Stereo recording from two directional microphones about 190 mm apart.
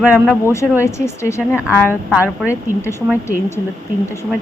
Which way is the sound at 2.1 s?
10° right (ahead or behind).